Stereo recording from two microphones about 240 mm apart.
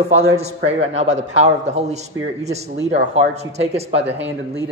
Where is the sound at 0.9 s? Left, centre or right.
Right.